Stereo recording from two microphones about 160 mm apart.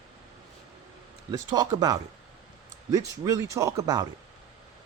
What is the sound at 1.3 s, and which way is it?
Speech, 25° right (ahead or behind).